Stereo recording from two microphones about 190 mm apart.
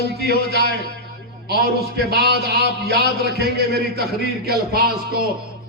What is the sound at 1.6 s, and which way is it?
Speech, 60° right (ahead or behind).